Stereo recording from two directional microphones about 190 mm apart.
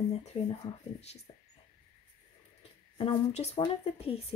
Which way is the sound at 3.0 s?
30° left (ahead or behind).